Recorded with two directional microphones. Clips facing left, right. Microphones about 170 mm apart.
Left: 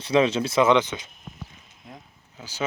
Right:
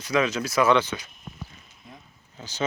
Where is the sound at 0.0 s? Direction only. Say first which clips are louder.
Left 4 dB; 30° left (ahead or behind).